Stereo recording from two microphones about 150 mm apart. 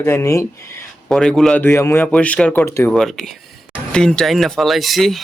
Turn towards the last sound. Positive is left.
turn(degrees=0)  # may be behind; listen again after turning